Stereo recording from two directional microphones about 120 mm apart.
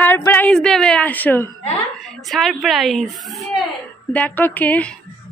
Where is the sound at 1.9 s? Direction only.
Centre (ahead or behind).